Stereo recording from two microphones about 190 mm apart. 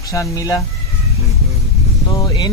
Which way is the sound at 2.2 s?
20° left (ahead or behind).